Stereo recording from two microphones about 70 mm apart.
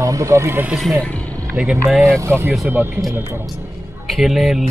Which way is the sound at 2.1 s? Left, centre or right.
Right.